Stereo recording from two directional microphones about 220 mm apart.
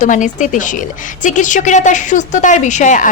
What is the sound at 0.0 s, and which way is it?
A woman's voice, 35° left (ahead or behind).